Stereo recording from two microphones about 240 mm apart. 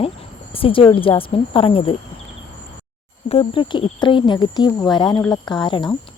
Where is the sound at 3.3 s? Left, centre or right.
Left.